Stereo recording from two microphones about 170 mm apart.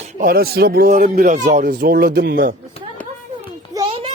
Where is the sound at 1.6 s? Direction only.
60° right (ahead or behind).